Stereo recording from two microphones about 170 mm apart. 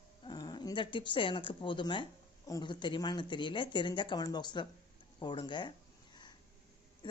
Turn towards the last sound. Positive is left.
turn(degrees=30)  # may be behind; listen again after turning